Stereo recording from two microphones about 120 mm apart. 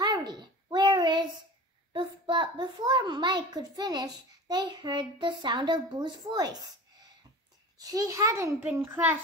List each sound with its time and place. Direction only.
0.0 s a sound: 35° right (ahead or behind)
1.9 s a child's voice: 40° right (ahead or behind)
7.8 s a child's voice: 30° right (ahead or behind)